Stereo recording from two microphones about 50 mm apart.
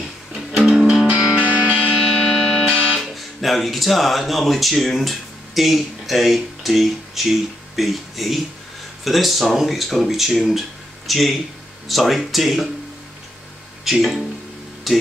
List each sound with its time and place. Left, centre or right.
0.3 s music: centre
1.1 s music: centre
2.1 s church bell: centre
2.6 s music: right
3.3 s speech: centre
13.8 s speech: centre